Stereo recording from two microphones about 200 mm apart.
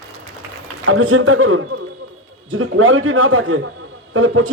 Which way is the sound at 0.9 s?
90° right.